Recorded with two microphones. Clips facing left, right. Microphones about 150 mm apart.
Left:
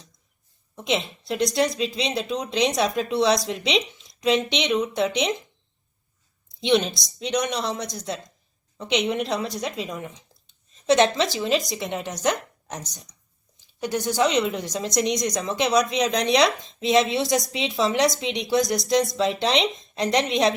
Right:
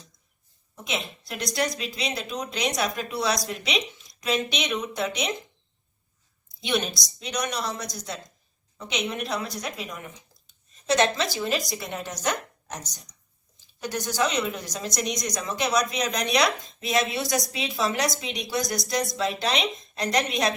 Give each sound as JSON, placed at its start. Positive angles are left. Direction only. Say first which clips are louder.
{"t": 0.9, "sound": "speech", "louder": "left 7 dB", "side_deg": 25}
{"t": 6.6, "sound": "a woman's voice", "louder": "left 6 dB", "side_deg": 25}